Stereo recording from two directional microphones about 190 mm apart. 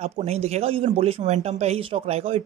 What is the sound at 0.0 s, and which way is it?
Speech, 35° right (ahead or behind).